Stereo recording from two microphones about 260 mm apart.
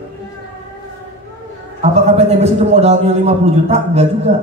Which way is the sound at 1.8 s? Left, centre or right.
Right.